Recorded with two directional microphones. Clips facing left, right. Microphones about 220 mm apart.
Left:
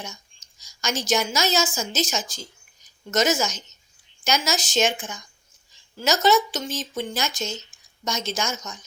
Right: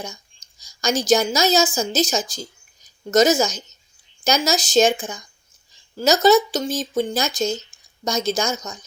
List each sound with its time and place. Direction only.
0.0 s a woman's voice: 35° right (ahead or behind)